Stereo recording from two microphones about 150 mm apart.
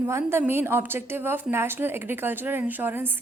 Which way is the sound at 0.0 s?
15° right (ahead or behind).